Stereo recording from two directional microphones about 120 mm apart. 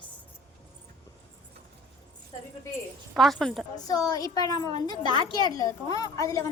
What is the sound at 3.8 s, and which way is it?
A woman's voice, 30° left (ahead or behind).